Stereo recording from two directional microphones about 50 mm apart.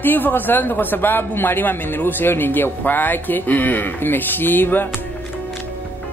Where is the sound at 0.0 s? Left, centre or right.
Left.